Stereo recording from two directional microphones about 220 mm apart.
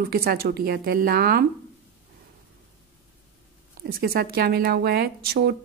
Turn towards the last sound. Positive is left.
turn(degrees=-45)  # may be behind; listen again after turning